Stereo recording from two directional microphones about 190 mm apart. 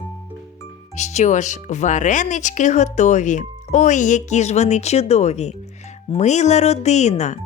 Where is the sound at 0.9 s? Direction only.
35° left (ahead or behind).